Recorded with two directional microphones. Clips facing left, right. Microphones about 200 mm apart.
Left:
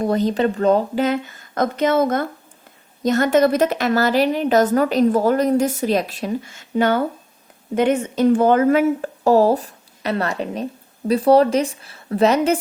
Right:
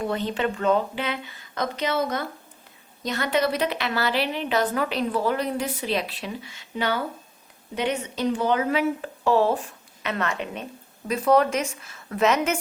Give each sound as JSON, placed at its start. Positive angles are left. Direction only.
{"t": 0.0, "sound": "a woman's voice", "side_deg": 40}